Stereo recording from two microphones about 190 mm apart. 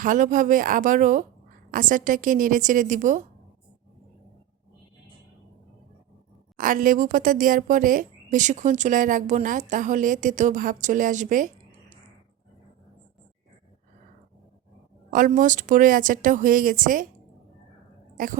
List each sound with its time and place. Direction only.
0.0 s speech: 45° right (ahead or behind)
6.6 s speech: 45° right (ahead or behind)
15.1 s speech: 45° right (ahead or behind)